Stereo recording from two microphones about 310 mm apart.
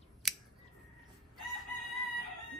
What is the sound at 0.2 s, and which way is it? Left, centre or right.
Scissors, centre.